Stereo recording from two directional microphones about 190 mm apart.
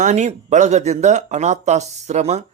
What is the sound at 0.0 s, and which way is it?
A man's voice, 40° right (ahead or behind).